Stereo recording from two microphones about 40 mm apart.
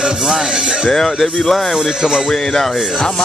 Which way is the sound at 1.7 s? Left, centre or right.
Centre.